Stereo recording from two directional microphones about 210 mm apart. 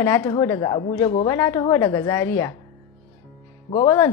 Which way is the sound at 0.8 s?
30° left (ahead or behind).